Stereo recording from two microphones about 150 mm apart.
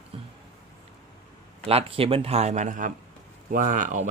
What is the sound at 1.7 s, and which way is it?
Speech, 40° right (ahead or behind).